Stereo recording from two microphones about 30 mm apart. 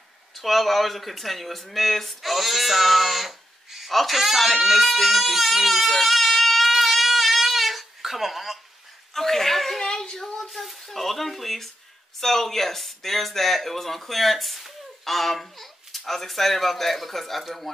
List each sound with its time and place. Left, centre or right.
0.3 s speech: centre
4.2 s baby cry: centre
9.1 s chuckle: centre
9.8 s child singing: left
10.5 s speech: centre